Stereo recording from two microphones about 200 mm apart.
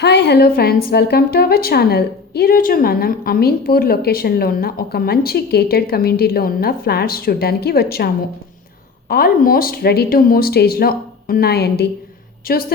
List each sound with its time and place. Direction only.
0.0 s a woman's voice: 55° left (ahead or behind)